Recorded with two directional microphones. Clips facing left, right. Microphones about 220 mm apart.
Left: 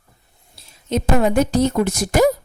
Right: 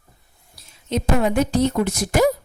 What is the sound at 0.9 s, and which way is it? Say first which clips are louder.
A woman's voice: left 2 dB; 40° left (ahead or behind).